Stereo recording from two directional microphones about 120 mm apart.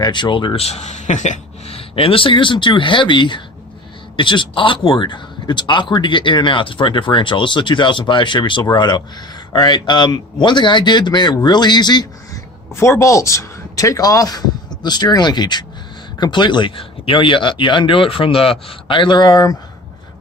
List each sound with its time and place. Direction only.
0.0 s speech: 40° left (ahead or behind); by 1.7 s 80° left
1.7 s speech: 50° left (ahead or behind)
12.7 s speech: 25° left (ahead or behind)